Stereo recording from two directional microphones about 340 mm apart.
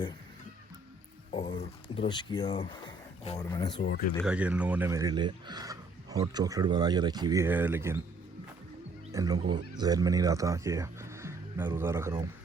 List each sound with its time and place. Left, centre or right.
1.3 s a sound: centre
2.0 s speech: centre
3.8 s speech: left
4.1 s speech: centre
9.1 s speech: centre